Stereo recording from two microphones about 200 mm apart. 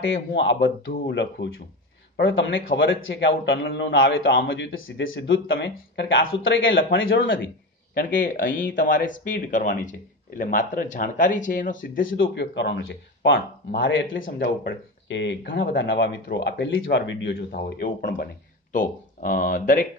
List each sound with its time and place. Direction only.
0.0 s speech: 65° left (ahead or behind)
4.5 s speech: 75° left (ahead or behind)
7.9 s speech: 45° left (ahead or behind)
12.1 s speech: 65° left (ahead or behind)
14.4 s speech: 60° left (ahead or behind)
16.3 s speech: 55° left (ahead or behind)